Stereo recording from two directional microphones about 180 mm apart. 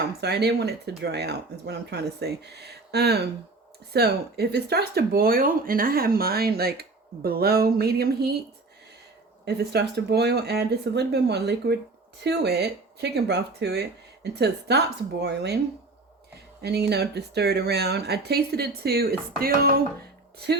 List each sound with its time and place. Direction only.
0.2 s speech: 65° right (ahead or behind)
9.6 s speech: 65° right (ahead or behind)
16.6 s speech: 65° right (ahead or behind)